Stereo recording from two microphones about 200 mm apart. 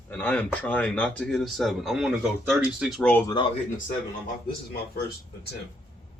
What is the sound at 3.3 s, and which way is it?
Speech, 25° left (ahead or behind).